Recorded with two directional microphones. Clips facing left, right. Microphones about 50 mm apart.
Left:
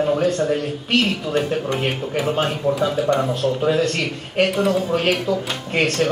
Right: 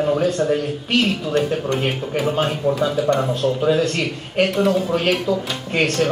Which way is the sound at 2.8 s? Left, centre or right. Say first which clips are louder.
Even; centre.